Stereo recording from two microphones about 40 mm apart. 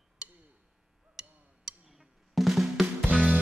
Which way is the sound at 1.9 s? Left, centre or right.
Centre.